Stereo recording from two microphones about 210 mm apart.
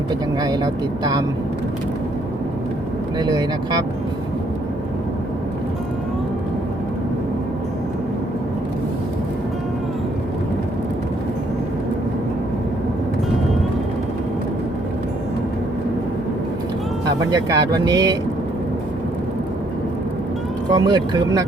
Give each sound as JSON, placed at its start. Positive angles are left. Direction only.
{"t": 0.4, "sound": "speech", "side_deg": -20}
{"t": 3.2, "sound": "speech", "side_deg": -20}
{"t": 17.3, "sound": "speech", "side_deg": -20}
{"t": 20.7, "sound": "speech", "side_deg": -20}